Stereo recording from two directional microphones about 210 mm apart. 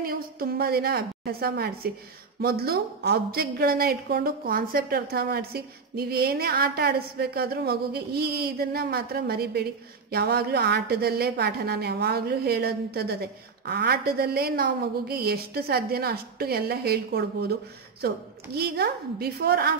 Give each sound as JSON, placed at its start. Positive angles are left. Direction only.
{"t": 0.0, "sound": "a woman's voice", "side_deg": -45}